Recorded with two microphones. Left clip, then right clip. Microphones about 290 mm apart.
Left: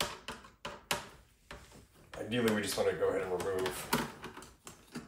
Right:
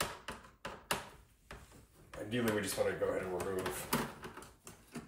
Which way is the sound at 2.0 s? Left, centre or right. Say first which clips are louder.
Left 4 dB; centre.